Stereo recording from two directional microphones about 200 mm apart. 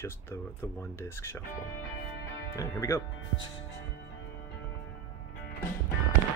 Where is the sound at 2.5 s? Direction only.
15° left (ahead or behind).